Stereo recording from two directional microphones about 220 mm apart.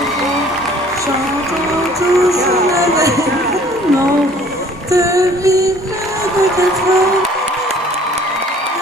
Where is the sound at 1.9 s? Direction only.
15° right (ahead or behind).